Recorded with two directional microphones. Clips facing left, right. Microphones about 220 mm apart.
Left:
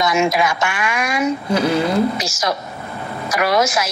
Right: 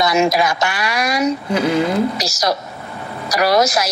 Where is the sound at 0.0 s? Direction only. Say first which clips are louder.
Right 1 dB; 35° right (ahead or behind).